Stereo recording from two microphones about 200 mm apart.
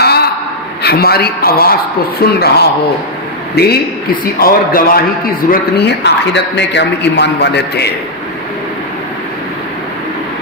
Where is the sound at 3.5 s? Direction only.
55° left (ahead or behind).